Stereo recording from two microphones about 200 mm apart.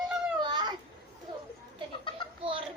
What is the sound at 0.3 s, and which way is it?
Babbling, 20° right (ahead or behind).